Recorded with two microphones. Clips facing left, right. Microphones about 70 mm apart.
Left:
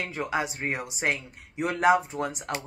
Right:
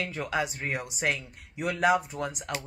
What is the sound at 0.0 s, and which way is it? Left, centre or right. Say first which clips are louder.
Speech: left 1 dB; left.